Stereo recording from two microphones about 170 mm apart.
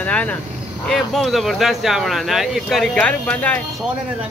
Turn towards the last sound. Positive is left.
turn(degrees=10)  # may be behind; listen again after turning